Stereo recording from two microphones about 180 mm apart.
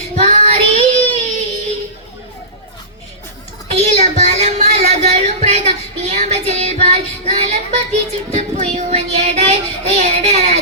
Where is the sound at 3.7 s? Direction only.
40° right (ahead or behind).